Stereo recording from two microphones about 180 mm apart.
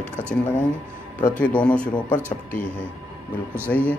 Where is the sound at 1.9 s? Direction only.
25° left (ahead or behind).